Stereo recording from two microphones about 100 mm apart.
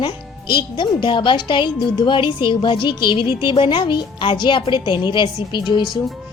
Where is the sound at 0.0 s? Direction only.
55° left (ahead or behind).